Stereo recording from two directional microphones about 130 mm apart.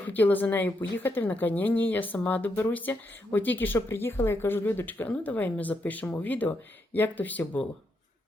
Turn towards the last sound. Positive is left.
turn(degrees=10)  # may be behind; listen again after turning